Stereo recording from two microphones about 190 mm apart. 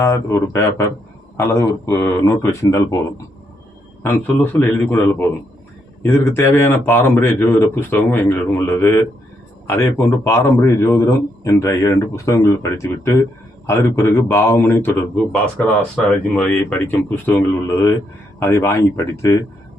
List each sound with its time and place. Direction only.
0.0 s a man's voice: 15° left (ahead or behind)
4.6 s a man's voice: 10° left (ahead or behind)